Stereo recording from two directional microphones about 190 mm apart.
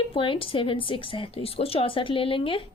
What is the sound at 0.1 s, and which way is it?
A woman's voice, 30° left (ahead or behind).